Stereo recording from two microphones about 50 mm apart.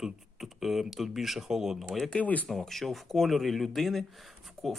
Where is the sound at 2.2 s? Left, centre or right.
Left.